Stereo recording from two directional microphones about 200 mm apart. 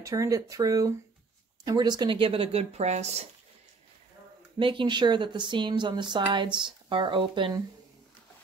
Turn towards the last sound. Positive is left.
turn(degrees=-25)  # may be behind; listen again after turning